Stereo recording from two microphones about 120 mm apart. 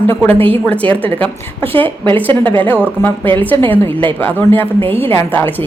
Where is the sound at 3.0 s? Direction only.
25° left (ahead or behind).